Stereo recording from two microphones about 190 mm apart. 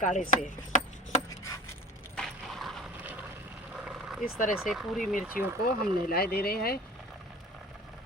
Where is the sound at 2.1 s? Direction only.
Centre (ahead or behind).